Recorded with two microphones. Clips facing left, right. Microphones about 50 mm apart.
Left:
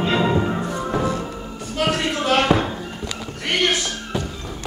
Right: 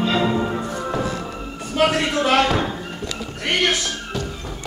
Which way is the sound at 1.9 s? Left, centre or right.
Right.